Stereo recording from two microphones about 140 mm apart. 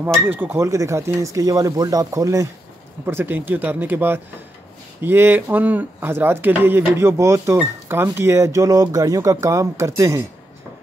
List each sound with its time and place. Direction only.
0.0 s speech: 15° right (ahead or behind)